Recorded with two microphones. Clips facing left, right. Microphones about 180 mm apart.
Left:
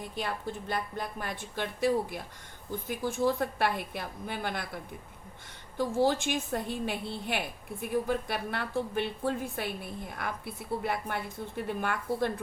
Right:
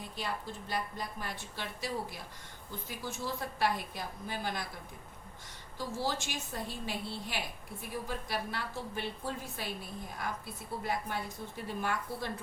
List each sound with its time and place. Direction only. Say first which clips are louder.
0.2 s a woman's voice: left 4 dB; 55° left (ahead or behind)
5.7 s a woman's voice: left 9 dB; 55° left (ahead or behind)